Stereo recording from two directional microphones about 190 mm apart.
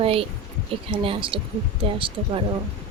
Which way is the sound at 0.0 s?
30° right (ahead or behind).